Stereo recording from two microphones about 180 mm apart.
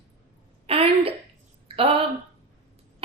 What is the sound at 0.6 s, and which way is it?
A woman's voice, 30° right (ahead or behind).